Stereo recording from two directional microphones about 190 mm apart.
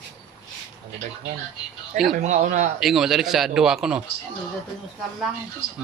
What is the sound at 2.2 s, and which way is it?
Speech, 40° right (ahead or behind).